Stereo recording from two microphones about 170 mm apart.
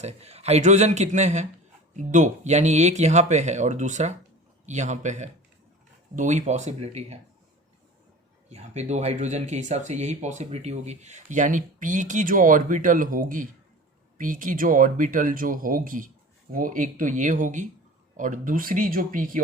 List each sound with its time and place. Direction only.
0.0 s a man's voice: 40° right (ahead or behind)
8.4 s speech: 40° right (ahead or behind)